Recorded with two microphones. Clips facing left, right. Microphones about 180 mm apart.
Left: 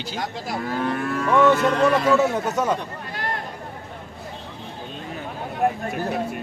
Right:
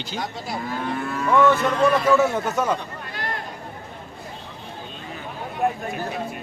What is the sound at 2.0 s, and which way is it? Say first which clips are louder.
Speech: even; 15° left (ahead or behind).